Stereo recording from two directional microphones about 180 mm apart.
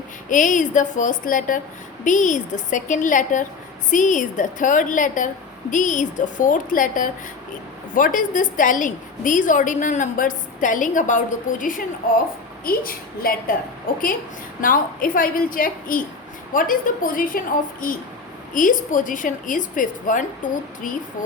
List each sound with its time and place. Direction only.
0.3 s a woman's voice: 45° left (ahead or behind)
12.6 s a woman's voice: 55° left (ahead or behind)